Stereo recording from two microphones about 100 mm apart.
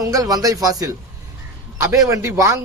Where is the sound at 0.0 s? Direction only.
35° right (ahead or behind).